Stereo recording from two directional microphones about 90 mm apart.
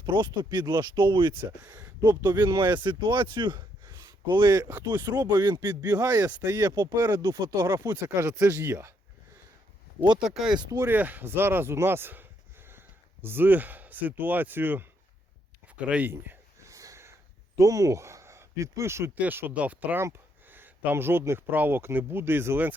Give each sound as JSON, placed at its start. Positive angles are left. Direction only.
{"t": 0.0, "sound": "speech", "side_deg": -60}
{"t": 2.3, "sound": "speech", "side_deg": -40}
{"t": 2.6, "sound": "speech", "side_deg": -60}
{"t": 4.0, "sound": "a sound", "side_deg": -55}
{"t": 4.4, "sound": "speech", "side_deg": -35}
{"t": 5.0, "sound": "speech", "side_deg": -50}
{"t": 6.4, "sound": "speech", "side_deg": -45}
{"t": 6.9, "sound": "speech", "side_deg": -35}
{"t": 10.2, "sound": "speech", "side_deg": -5}
{"t": 10.8, "sound": "speech", "side_deg": -20}
{"t": 16.6, "sound": "snort", "side_deg": -35}
{"t": 17.6, "sound": "speech", "side_deg": -40}
{"t": 19.1, "sound": "speech", "side_deg": -20}
{"t": 20.0, "sound": "speech", "side_deg": -25}